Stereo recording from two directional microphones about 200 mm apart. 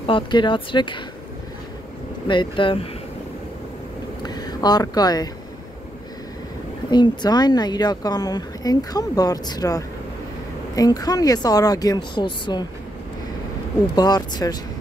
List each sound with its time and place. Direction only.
0.0 s speech: 25° left (ahead or behind)
2.2 s speech: 25° left (ahead or behind)
4.2 s speech: 20° left (ahead or behind)
6.9 s speech: 20° left (ahead or behind)
13.9 s speech: 20° left (ahead or behind)